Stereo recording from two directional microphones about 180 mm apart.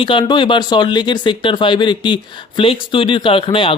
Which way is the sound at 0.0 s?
30° left (ahead or behind).